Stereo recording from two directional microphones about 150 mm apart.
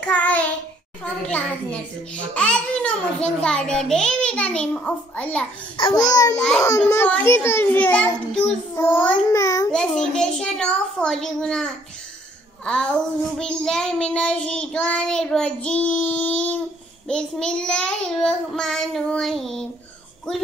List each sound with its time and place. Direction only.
0.0 s child singing: 10° left (ahead or behind)
1.2 s a child's voice: 10° left (ahead or behind)
5.8 s speech: 30° left (ahead or behind)
6.3 s child singing: 5° left (ahead or behind)
6.6 s child singing: 20° left (ahead or behind)
9.3 s a child's voice: 20° left (ahead or behind)
9.7 s child singing: 5° left (ahead or behind)